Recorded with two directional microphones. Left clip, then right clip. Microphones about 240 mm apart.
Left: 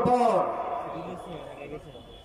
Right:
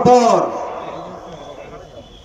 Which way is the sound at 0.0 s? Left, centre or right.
Right.